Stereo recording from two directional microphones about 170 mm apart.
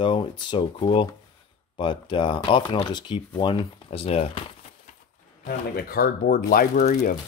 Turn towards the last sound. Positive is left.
turn(degrees=50)  # may be behind; listen again after turning